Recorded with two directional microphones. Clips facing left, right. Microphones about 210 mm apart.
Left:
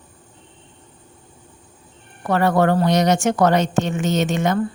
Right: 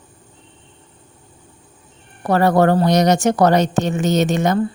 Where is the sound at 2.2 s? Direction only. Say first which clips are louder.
Right 3 dB; 35° right (ahead or behind).